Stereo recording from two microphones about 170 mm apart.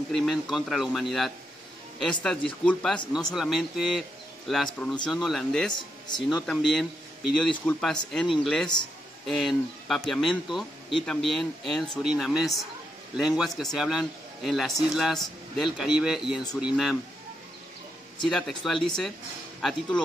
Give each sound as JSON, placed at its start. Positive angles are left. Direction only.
{"t": 0.1, "sound": "a man's voice", "side_deg": 0}
{"t": 18.2, "sound": "a man's voice", "side_deg": 5}